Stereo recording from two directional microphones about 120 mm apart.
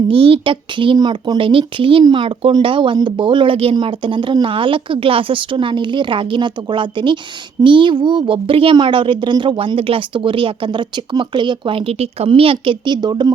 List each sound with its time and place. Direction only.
0.1 s speech: 50° right (ahead or behind)
0.9 s speech: 30° right (ahead or behind)
1.4 s speech: 45° right (ahead or behind)